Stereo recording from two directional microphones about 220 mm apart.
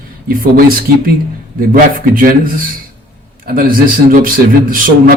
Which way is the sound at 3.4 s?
40° right (ahead or behind).